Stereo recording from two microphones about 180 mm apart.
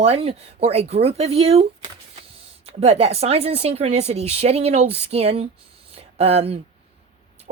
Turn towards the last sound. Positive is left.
turn(degrees=-35)  # may be behind; listen again after turning